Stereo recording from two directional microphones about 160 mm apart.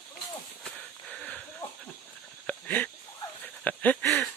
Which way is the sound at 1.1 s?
5° left (ahead or behind).